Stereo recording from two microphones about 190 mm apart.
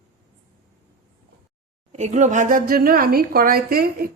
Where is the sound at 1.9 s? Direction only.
40° right (ahead or behind).